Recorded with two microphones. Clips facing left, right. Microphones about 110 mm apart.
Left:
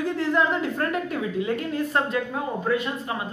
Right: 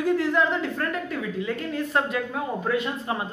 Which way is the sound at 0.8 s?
20° left (ahead or behind).